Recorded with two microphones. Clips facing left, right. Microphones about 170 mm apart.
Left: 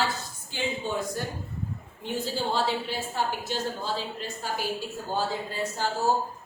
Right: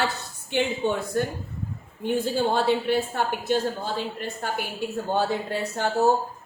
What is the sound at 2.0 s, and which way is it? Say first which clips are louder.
A woman's voice: right 6 dB; 55° right (ahead or behind).